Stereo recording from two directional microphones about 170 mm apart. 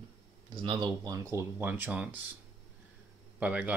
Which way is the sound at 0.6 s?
25° right (ahead or behind).